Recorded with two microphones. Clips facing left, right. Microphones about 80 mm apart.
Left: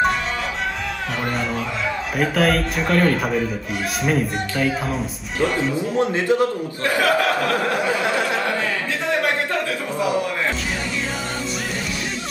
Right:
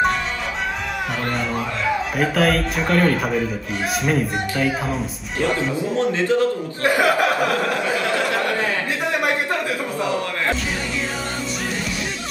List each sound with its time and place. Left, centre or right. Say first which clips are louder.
1.2 s speech: left 2 dB; centre
5.9 s a man's voice: even; centre
6.8 s speech: right 1 dB; right
7.7 s a sound: left 1 dB; left